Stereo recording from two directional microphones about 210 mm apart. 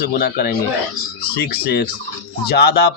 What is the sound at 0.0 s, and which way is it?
A man's voice, 50° left (ahead or behind).